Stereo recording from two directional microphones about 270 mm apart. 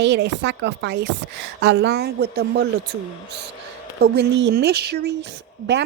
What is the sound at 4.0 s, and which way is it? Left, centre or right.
Speech, right.